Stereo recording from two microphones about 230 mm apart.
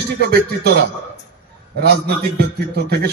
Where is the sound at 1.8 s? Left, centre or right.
Right.